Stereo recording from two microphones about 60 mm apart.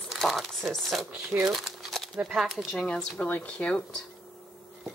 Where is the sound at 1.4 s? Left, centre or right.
Centre.